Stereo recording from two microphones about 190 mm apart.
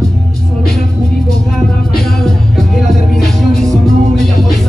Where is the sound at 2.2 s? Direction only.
Centre (ahead or behind).